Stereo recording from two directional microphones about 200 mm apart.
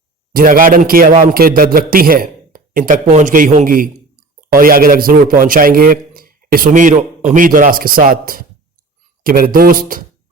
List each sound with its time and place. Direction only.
0.3 s speech: 45° right (ahead or behind)